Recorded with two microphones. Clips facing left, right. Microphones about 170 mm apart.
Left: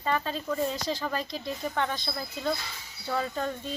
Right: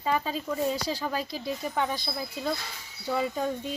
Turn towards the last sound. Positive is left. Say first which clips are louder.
# right 2 dB
turn(degrees=-10)  # may be behind; listen again after turning